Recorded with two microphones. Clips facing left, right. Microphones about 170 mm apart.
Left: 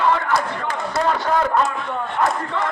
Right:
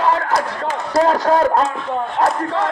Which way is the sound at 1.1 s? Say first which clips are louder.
Right 2 dB; 35° right (ahead or behind).